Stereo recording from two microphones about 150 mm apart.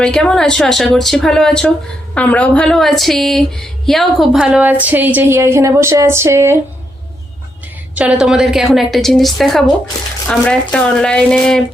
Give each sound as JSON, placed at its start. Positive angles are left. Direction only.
{"t": 0.0, "sound": "a woman's voice", "side_deg": 5}
{"t": 7.9, "sound": "a woman's voice", "side_deg": -5}